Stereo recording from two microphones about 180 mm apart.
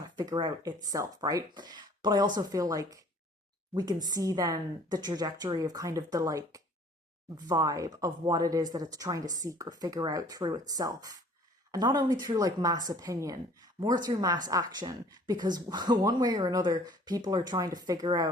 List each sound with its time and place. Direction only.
0.0 s a woman's voice: 20° right (ahead or behind)